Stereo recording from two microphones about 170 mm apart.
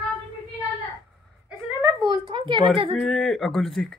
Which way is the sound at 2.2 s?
30° right (ahead or behind).